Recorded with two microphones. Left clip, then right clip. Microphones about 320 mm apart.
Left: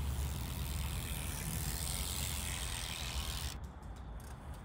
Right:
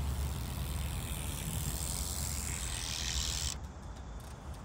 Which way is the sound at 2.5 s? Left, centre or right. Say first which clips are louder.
Right 2 dB; left.